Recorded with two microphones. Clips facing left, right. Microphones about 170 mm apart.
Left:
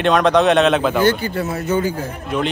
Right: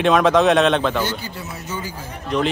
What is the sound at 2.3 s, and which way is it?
Speech, 5° left (ahead or behind).